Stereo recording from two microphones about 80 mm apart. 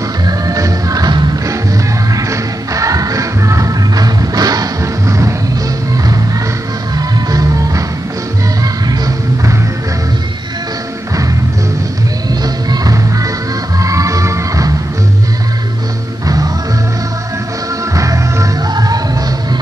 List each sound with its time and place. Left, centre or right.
0.3 s music: right
2.1 s music: right
7.0 s music: right
8.8 s music: right
12.6 s music: right
17.9 s music: right